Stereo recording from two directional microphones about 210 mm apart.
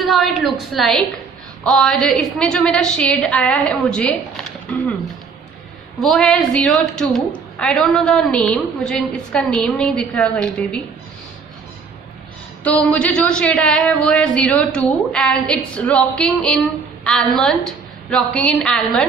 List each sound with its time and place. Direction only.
0.1 s a woman's voice: centre (ahead or behind)
5.9 s a woman's voice: centre (ahead or behind)
12.9 s a woman's voice: 5° left (ahead or behind)